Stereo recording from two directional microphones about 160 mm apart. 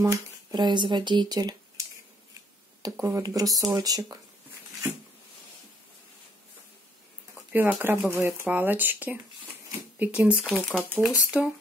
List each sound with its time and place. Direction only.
0.0 s speech: 20° right (ahead or behind)
2.8 s speech: 20° right (ahead or behind)
7.3 s speech: 10° right (ahead or behind)